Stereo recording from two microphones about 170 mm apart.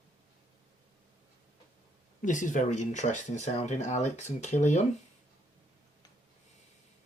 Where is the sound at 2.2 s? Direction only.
50° left (ahead or behind).